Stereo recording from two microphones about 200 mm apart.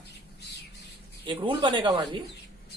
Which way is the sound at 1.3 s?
25° right (ahead or behind).